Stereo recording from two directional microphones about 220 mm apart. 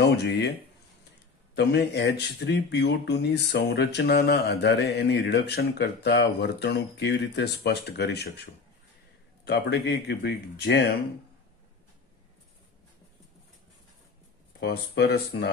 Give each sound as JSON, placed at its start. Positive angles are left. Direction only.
{"t": 0.0, "sound": "speech", "side_deg": 50}
{"t": 1.5, "sound": "speech", "side_deg": 50}
{"t": 9.4, "sound": "speech", "side_deg": 50}
{"t": 14.6, "sound": "speech", "side_deg": 45}